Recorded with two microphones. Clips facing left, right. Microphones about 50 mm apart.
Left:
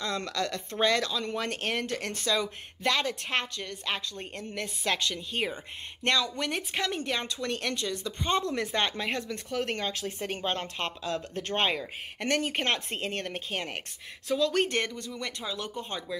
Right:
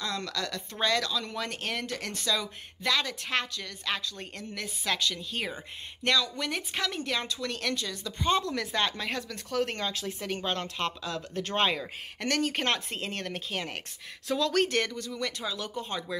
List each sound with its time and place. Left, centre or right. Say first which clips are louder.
0.0 s speech: left 2 dB; left
5.1 s speech: left 3 dB; left
6.0 s speech: even; left
6.7 s speech: left 1 dB; left
14.2 s speech: even; centre
14.7 s speech: right 1 dB; left